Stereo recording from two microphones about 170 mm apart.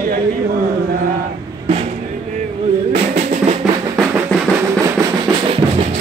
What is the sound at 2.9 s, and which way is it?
Drum, 40° right (ahead or behind).